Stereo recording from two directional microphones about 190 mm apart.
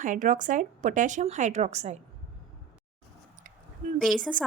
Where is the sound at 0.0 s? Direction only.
45° right (ahead or behind).